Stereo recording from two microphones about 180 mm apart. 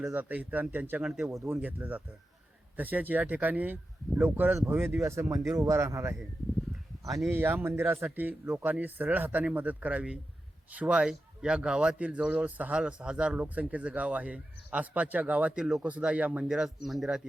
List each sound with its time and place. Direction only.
0.0 s a man's voice: 10° right (ahead or behind)
1.3 s a man's voice: 15° right (ahead or behind)
7.3 s a man's voice: 10° right (ahead or behind)